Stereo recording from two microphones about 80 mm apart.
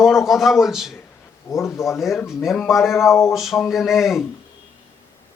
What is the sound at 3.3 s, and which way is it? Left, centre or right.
Speech, centre.